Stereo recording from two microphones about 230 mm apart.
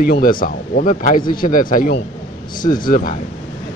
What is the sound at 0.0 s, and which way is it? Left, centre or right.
Speech, left.